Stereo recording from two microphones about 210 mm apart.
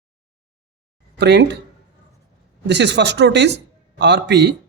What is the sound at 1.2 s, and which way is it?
Speech, 55° right (ahead or behind).